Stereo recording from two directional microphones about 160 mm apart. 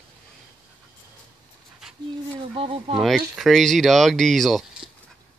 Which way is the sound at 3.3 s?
Centre (ahead or behind).